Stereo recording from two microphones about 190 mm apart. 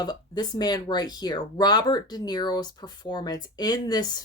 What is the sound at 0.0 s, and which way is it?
Speech, 20° left (ahead or behind).